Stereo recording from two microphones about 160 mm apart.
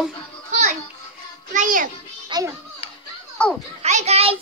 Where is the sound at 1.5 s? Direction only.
55° right (ahead or behind).